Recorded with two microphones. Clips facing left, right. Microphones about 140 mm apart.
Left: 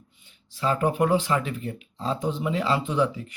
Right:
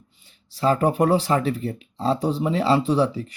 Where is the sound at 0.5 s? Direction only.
35° right (ahead or behind).